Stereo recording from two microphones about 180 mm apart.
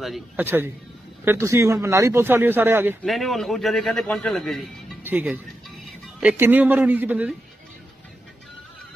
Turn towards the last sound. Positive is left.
turn(degrees=-10)  # may be behind; listen again after turning